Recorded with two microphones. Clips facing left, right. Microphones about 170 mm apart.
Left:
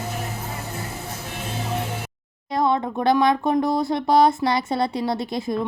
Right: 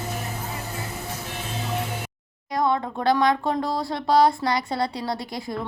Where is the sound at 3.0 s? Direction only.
20° left (ahead or behind).